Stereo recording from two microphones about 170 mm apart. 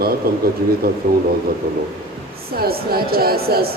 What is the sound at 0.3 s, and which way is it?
Speech, 65° right (ahead or behind).